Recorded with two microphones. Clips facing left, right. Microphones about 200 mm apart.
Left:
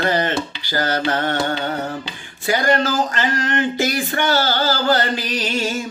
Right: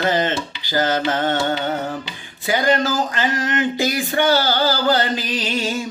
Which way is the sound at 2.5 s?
15° right (ahead or behind).